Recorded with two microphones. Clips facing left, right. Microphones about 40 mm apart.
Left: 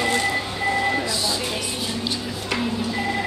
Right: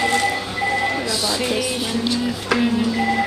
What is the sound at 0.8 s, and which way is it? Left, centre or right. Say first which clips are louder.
Reversing beeps: right 1 dB; centre.